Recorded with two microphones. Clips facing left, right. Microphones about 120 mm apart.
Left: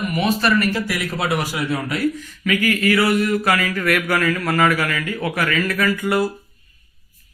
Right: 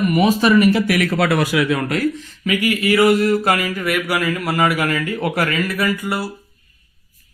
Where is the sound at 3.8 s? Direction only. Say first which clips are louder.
Left 1 dB; 10° right (ahead or behind).